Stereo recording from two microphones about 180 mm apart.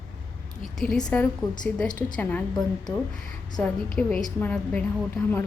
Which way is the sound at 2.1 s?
5° left (ahead or behind).